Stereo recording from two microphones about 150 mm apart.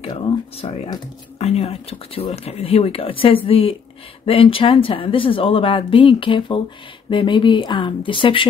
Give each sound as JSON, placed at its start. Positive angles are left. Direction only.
{"t": 0.0, "sound": "speech", "side_deg": 35}